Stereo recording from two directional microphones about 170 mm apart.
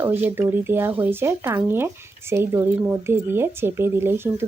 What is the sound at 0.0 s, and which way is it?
Speech, 10° right (ahead or behind).